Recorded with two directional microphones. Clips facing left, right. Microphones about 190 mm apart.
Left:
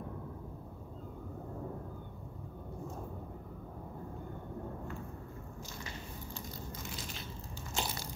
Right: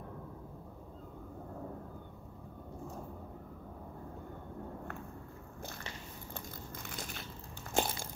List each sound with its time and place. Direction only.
7.7 s crushing: 50° right (ahead or behind)